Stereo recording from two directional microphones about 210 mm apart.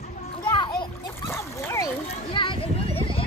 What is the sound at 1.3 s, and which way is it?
Dog, 10° left (ahead or behind).